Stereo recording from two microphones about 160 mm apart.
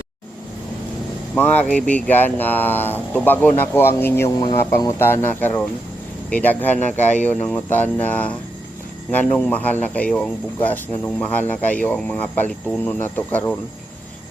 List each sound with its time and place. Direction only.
1.4 s speech: 10° left (ahead or behind)
6.7 s speech: 50° left (ahead or behind)
7.3 s speech: 10° left (ahead or behind)